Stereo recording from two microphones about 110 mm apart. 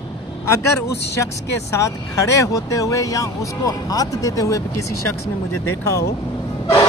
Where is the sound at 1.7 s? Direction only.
30° left (ahead or behind).